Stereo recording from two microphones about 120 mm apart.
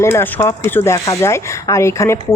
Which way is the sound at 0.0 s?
20° left (ahead or behind).